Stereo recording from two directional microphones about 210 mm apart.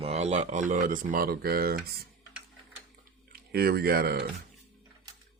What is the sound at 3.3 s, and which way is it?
Speech, 50° right (ahead or behind).